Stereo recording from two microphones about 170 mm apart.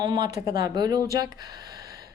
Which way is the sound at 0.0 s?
25° right (ahead or behind).